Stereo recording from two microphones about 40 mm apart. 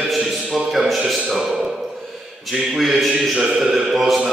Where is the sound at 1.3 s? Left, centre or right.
Centre.